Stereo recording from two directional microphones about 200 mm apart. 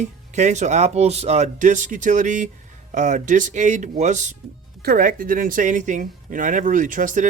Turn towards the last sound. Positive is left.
turn(degrees=-40)  # may be behind; listen again after turning